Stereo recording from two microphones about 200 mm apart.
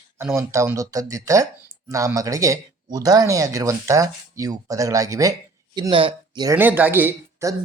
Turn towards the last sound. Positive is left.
turn(degrees=-15)  # may be behind; listen again after turning